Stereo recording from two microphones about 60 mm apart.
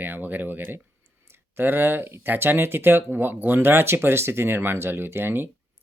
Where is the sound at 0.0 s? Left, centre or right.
Right.